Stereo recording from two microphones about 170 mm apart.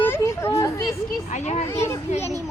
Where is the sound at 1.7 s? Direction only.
15° left (ahead or behind).